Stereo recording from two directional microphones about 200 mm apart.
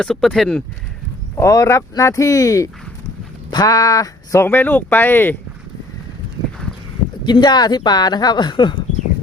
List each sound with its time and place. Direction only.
0.0 s speech: 5° left (ahead or behind)
1.4 s speech: 15° left (ahead or behind)
7.3 s a woman's voice: 20° left (ahead or behind)